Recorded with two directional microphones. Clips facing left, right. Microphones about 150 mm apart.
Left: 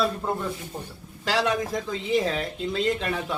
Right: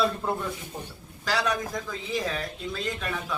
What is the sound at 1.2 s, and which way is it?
Speech, 25° left (ahead or behind).